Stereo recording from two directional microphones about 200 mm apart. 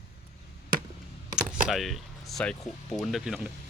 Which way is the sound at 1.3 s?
Centre (ahead or behind).